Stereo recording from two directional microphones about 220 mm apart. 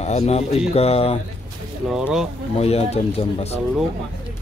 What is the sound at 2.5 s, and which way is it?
Speech, 30° left (ahead or behind).